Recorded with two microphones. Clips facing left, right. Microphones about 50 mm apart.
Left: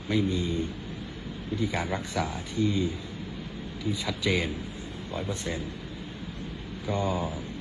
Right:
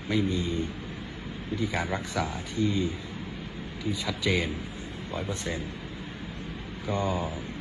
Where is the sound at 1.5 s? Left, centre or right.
Right.